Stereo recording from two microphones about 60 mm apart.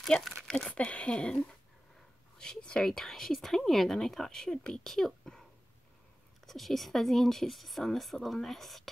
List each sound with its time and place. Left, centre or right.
0.4 s a sound: centre
0.7 s a woman's voice: left
6.4 s speech: centre